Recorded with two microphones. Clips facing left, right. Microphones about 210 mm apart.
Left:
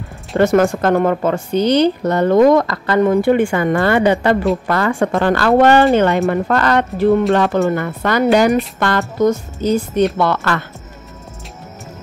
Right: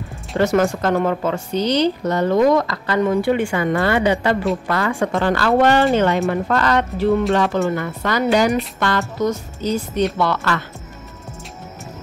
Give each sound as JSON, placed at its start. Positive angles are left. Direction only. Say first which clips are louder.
{"t": 0.4, "sound": "a woman's voice", "louder": "left 4 dB", "side_deg": 55}